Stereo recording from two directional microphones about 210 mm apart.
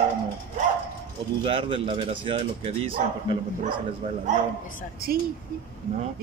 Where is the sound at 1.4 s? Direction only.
25° right (ahead or behind).